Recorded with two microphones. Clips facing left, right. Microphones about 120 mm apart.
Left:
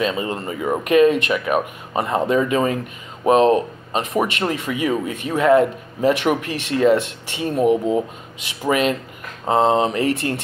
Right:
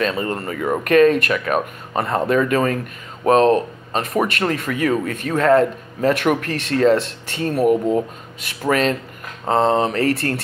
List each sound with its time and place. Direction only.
0.0 s speech: 15° left (ahead or behind)